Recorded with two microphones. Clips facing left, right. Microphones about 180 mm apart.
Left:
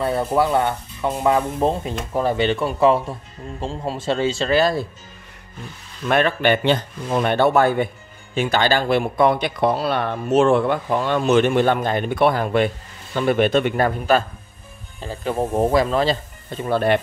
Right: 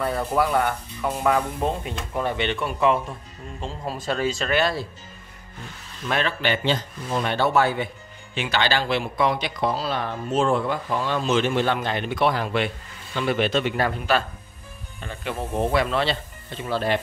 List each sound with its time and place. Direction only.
0.0 s speech: 25° left (ahead or behind)
6.0 s speech: 55° left (ahead or behind)
15.0 s speech: 35° left (ahead or behind); by 17.0 s 55° left (ahead or behind)